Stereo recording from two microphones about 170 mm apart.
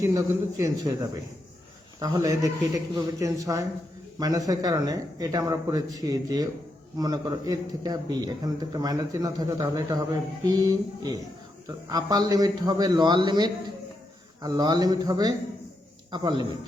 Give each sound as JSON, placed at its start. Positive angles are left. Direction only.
{"t": 0.0, "sound": "a man's voice", "side_deg": -20}
{"t": 2.0, "sound": "a man's voice", "side_deg": -20}